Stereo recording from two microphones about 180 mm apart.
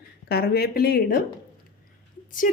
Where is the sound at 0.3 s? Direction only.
60° left (ahead or behind).